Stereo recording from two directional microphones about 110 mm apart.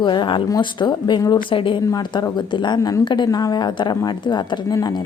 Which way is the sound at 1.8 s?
40° left (ahead or behind).